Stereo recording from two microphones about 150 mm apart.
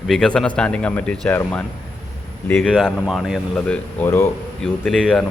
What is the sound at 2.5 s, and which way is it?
A man's voice, 10° left (ahead or behind).